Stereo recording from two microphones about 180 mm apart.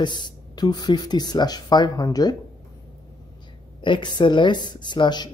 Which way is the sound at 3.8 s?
25° left (ahead or behind).